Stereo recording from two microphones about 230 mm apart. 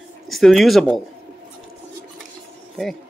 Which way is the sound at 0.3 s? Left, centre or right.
Centre.